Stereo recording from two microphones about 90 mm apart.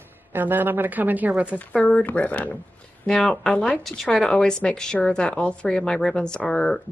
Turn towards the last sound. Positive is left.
turn(degrees=5)  # may be behind; listen again after turning